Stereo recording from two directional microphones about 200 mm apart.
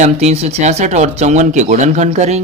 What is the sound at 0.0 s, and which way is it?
Speech, 35° right (ahead or behind).